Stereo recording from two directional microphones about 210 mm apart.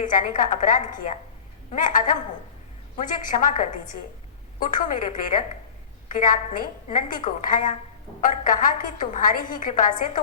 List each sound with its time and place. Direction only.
0.0 s a woman's voice: 40° left (ahead or behind)